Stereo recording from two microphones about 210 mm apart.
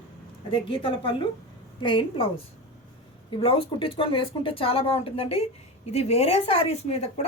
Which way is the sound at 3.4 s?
25° left (ahead or behind).